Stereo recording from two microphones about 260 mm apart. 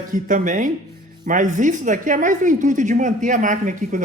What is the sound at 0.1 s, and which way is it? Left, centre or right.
A woman's voice, right.